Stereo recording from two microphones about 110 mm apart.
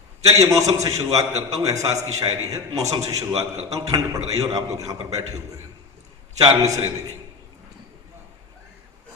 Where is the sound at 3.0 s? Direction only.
75° right (ahead or behind).